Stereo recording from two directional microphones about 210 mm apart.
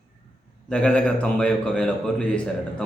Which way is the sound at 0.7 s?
5° left (ahead or behind).